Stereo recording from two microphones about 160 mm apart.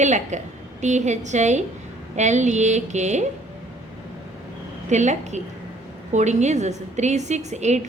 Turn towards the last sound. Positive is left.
turn(degrees=-45)  # may be behind; listen again after turning